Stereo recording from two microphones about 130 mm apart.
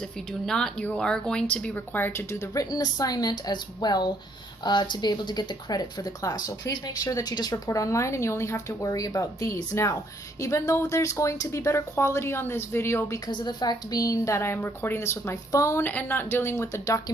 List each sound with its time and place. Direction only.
0.3 s a woman's voice: 5° left (ahead or behind); by 13.3 s 20° left (ahead or behind)
13.3 s a woman's voice: 35° left (ahead or behind)